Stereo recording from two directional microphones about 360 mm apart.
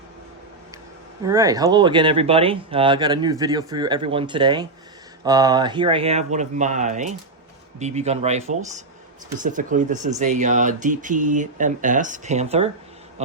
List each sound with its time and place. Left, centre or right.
1.2 s speech: centre